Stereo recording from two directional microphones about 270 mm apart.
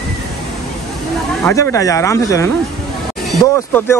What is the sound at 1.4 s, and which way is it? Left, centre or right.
Speech, centre.